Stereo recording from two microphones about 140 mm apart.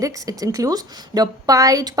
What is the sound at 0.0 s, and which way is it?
A woman's voice, 25° right (ahead or behind).